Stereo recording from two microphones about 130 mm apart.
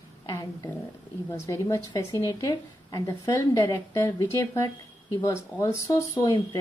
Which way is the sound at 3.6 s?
20° left (ahead or behind).